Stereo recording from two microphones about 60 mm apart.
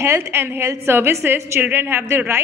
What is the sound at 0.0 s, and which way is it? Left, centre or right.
A woman's voice, right.